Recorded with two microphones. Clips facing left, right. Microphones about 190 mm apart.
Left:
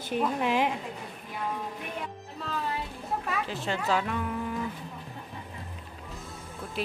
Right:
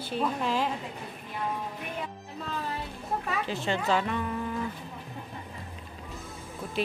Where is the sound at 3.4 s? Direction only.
Centre (ahead or behind).